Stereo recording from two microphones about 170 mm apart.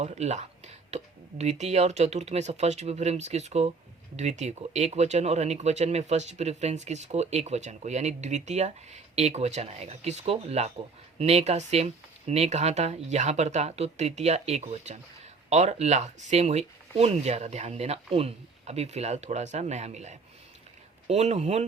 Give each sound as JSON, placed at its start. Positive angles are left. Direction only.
{"t": 0.0, "sound": "speech", "side_deg": -40}